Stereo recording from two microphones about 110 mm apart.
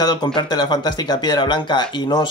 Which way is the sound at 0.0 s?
45° left (ahead or behind).